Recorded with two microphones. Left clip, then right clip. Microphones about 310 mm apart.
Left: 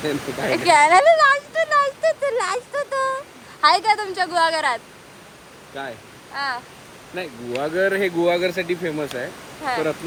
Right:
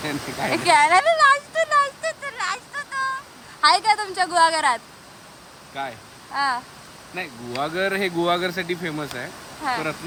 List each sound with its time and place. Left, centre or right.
0.0 s a woman's voice: centre
6.3 s a woman's voice: centre